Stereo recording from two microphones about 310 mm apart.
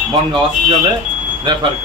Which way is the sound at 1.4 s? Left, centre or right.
Centre.